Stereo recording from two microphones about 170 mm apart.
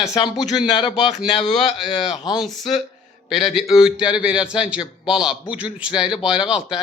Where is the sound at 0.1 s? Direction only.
40° left (ahead or behind).